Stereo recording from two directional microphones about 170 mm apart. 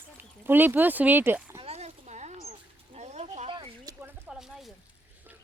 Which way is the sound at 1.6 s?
40° right (ahead or behind).